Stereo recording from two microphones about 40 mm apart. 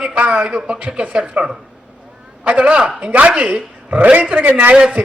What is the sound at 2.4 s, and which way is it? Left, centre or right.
A man's voice, right.